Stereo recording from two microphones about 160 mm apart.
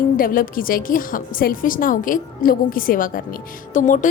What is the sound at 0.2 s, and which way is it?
A woman's voice, 60° left (ahead or behind).